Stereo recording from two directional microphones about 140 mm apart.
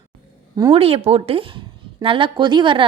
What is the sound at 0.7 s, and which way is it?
Speech, 45° right (ahead or behind).